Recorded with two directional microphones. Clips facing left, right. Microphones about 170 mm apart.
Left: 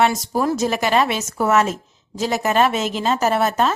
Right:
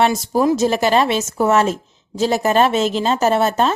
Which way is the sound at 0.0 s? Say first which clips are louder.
Right 3 dB; 30° right (ahead or behind).